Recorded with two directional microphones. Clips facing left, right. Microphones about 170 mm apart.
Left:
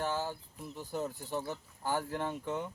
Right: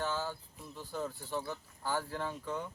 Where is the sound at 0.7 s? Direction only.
15° left (ahead or behind).